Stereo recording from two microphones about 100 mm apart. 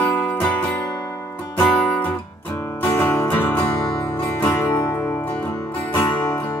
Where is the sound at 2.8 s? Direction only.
25° left (ahead or behind).